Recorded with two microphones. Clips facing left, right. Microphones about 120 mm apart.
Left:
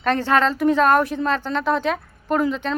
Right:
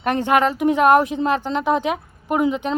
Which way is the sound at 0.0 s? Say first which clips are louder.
Right 1 dB; 15° right (ahead or behind).